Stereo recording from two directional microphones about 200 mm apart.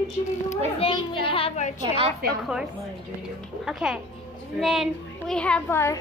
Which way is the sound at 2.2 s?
50° right (ahead or behind).